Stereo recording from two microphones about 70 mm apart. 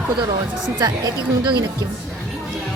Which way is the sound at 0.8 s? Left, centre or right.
Right.